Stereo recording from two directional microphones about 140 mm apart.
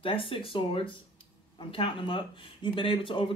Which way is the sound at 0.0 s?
40° left (ahead or behind).